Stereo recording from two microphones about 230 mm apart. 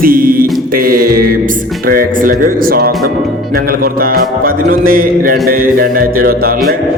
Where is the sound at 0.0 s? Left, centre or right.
Right.